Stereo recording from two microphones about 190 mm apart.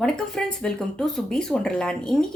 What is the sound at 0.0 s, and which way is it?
Speech, 5° left (ahead or behind).